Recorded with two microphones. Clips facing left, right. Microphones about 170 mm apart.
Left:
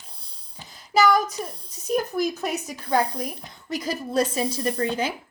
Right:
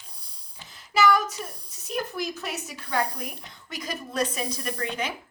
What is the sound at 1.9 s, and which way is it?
A woman's voice, 45° left (ahead or behind).